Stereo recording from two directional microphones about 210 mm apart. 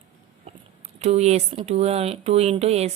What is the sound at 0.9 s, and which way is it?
Speech, 30° right (ahead or behind).